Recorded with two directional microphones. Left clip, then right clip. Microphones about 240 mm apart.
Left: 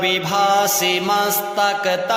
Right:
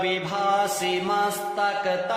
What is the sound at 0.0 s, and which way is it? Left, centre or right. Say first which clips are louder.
Mantra: left 7 dB; left.